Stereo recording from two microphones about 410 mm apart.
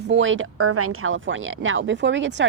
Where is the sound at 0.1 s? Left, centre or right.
Right.